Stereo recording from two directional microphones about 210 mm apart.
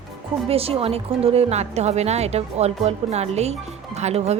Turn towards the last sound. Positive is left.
turn(degrees=-30)  # may be behind; listen again after turning